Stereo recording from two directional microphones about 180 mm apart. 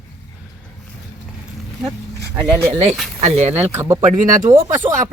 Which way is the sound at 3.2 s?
40° right (ahead or behind).